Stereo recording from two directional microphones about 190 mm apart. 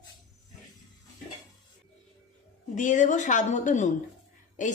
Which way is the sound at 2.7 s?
40° left (ahead or behind).